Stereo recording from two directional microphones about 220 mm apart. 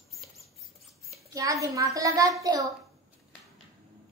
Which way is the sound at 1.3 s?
15° right (ahead or behind).